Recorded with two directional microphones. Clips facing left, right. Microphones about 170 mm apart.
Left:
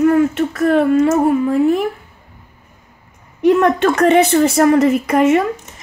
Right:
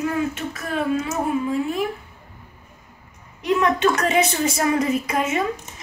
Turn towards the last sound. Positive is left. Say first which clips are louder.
# left 9 dB
turn(degrees=65)  # may be behind; listen again after turning